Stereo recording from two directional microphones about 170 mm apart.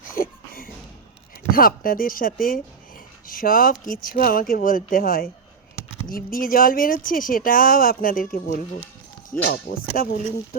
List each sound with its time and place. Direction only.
0.1 s a sound: 60° left (ahead or behind)
1.5 s speech: 60° left (ahead or behind)
9.3 s speech: 10° left (ahead or behind)
9.9 s speech: 60° left (ahead or behind)